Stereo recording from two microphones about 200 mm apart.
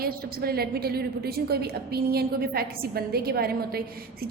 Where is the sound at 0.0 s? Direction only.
50° right (ahead or behind).